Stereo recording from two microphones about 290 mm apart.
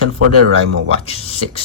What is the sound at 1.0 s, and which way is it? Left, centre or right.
Speech, left.